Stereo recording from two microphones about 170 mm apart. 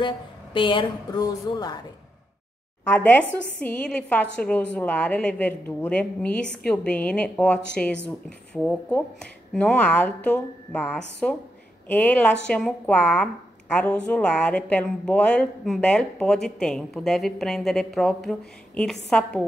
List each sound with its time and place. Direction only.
0.0 s a woman's voice: 30° left (ahead or behind)
2.9 s a woman's voice: 10° left (ahead or behind)